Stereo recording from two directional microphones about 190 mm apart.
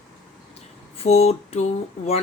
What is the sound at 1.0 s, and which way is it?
Speech, 30° left (ahead or behind).